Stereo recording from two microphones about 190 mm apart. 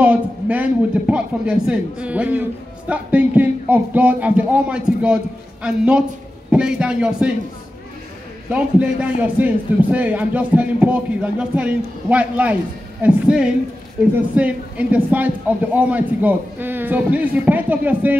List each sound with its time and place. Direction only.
0.0 s a man's voice: 5° right (ahead or behind)
8.5 s a man's voice: 5° right (ahead or behind)